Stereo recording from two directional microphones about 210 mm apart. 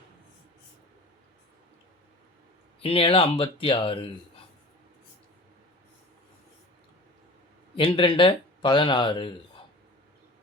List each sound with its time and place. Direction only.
2.8 s speech: 25° left (ahead or behind)
7.8 s speech: 25° left (ahead or behind)